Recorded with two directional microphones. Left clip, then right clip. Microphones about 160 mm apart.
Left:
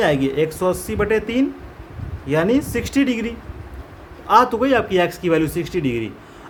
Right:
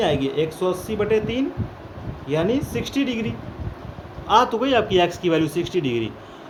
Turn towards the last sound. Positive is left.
turn(degrees=40)  # may be behind; listen again after turning